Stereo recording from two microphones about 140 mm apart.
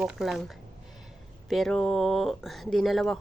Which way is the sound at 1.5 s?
5° left (ahead or behind).